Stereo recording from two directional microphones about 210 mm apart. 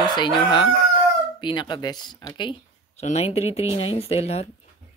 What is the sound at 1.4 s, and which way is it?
Speech, 20° left (ahead or behind).